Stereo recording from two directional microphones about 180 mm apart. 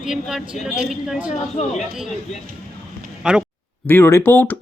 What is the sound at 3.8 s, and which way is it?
Speech, 10° left (ahead or behind).